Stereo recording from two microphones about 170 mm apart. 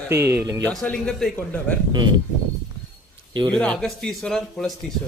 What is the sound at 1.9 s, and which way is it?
Speech, 25° right (ahead or behind).